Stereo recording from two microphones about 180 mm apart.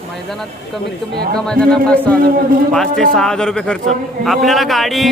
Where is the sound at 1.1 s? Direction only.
60° right (ahead or behind).